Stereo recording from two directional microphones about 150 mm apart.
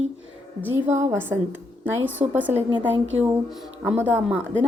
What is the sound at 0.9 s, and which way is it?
Speech, 20° right (ahead or behind).